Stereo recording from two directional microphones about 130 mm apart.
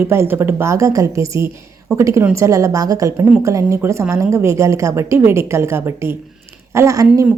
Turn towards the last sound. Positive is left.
turn(degrees=-25)  # may be behind; listen again after turning